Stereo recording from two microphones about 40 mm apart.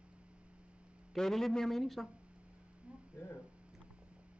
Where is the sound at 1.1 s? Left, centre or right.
Centre.